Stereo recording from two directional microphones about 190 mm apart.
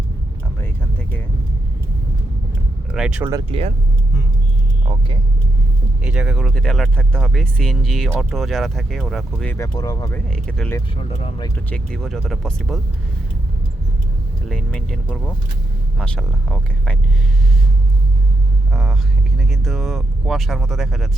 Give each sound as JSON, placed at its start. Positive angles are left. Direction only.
{"t": 2.9, "sound": "speech", "side_deg": -5}
{"t": 3.5, "sound": "speech", "side_deg": -30}
{"t": 4.9, "sound": "vehicle", "side_deg": -30}
{"t": 6.0, "sound": "speech", "side_deg": -5}
{"t": 9.6, "sound": "speech", "side_deg": 20}
{"t": 10.9, "sound": "speech", "side_deg": 35}
{"t": 11.3, "sound": "speech", "side_deg": 20}
{"t": 11.7, "sound": "speech", "side_deg": 5}
{"t": 14.4, "sound": "speech", "side_deg": 5}
{"t": 18.7, "sound": "speech", "side_deg": 0}